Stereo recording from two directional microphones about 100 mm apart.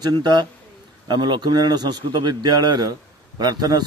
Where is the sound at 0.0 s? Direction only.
45° right (ahead or behind).